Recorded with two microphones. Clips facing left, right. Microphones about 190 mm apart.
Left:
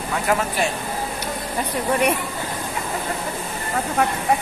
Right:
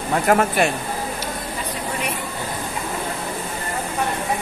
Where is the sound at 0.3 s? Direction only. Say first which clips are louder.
Right 4 dB; 55° right (ahead or behind).